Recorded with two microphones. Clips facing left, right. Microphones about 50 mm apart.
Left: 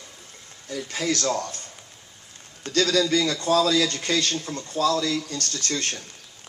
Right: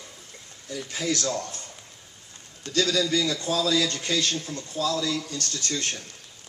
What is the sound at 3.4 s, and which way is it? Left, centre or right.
Speech, left.